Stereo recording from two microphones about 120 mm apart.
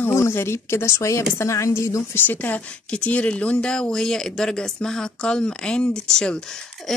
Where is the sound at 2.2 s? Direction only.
15° left (ahead or behind).